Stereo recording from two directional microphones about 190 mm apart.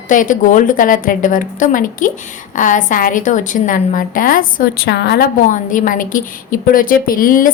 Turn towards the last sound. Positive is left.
turn(degrees=45)  # may be behind; listen again after turning